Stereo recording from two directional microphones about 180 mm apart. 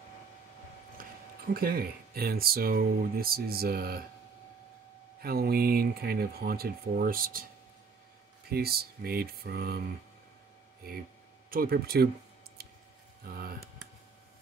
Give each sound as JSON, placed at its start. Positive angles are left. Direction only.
{"t": 1.5, "sound": "speech", "side_deg": -55}
{"t": 5.2, "sound": "speech", "side_deg": -55}
{"t": 8.5, "sound": "speech", "side_deg": -60}
{"t": 11.5, "sound": "speech", "side_deg": -55}
{"t": 13.2, "sound": "speech", "side_deg": -55}